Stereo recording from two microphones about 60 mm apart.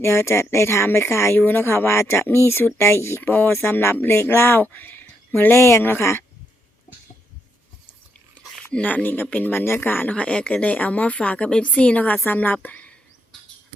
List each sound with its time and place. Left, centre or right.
0.0 s speech: left
8.4 s a sound: left
8.7 s speech: left
10.2 s speech: centre